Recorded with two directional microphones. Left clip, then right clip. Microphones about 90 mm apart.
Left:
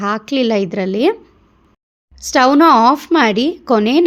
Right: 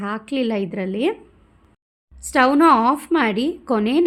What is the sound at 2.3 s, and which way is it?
A woman's voice, 30° left (ahead or behind).